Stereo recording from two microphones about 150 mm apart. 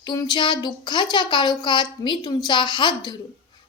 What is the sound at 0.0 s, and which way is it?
A woman's voice, 30° left (ahead or behind).